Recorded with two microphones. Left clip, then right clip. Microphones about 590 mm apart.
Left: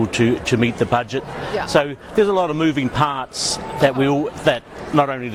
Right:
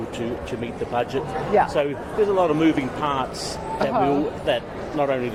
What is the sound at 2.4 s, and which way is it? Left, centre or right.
Speech, left.